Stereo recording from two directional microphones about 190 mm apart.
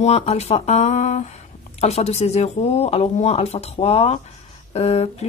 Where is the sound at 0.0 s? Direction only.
35° left (ahead or behind).